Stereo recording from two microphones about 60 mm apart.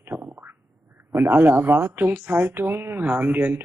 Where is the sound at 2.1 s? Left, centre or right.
Right.